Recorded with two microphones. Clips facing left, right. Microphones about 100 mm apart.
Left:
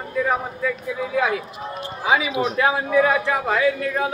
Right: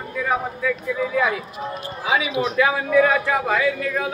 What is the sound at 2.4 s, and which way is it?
A man's voice, 35° left (ahead or behind).